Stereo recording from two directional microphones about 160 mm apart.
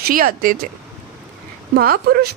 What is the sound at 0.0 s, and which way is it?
Speech, 60° right (ahead or behind).